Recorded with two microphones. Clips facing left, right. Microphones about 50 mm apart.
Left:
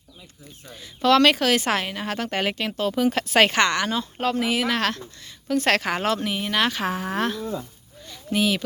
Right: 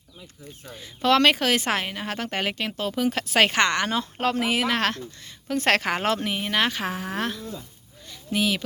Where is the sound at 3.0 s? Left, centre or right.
Centre.